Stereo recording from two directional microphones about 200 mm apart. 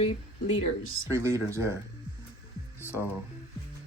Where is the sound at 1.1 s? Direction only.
15° right (ahead or behind).